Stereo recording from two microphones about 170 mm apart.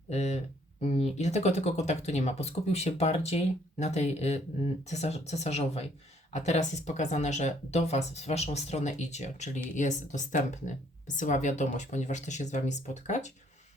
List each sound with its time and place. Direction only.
0.1 s speech: 40° left (ahead or behind)